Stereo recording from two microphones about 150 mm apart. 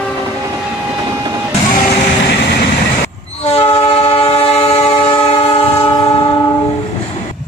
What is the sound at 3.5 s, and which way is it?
Train, 40° left (ahead or behind).